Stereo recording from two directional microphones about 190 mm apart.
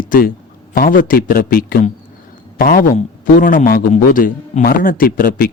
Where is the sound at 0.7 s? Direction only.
50° left (ahead or behind).